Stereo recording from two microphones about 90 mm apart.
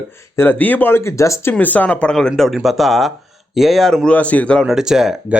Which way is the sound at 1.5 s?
20° left (ahead or behind).